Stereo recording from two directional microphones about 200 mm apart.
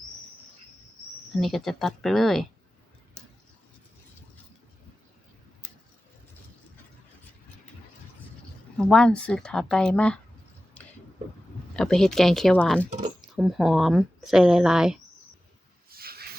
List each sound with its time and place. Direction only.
1.4 s speech: centre (ahead or behind)
8.8 s speech: 5° left (ahead or behind)
11.8 s speech: 5° left (ahead or behind)
15.9 s a sound: 50° right (ahead or behind)